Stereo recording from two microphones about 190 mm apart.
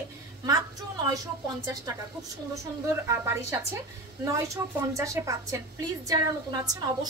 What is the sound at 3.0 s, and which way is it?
A woman's voice, 15° right (ahead or behind).